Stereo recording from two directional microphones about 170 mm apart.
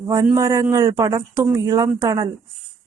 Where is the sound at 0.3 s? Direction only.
20° right (ahead or behind).